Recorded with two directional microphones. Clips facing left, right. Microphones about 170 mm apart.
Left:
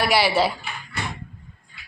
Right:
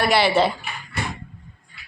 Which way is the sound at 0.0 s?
5° left (ahead or behind).